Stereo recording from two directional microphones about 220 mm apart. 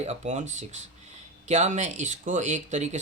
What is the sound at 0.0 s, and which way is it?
Speech, 30° right (ahead or behind).